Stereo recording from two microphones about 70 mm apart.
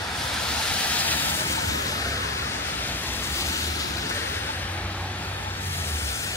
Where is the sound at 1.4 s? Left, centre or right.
Left.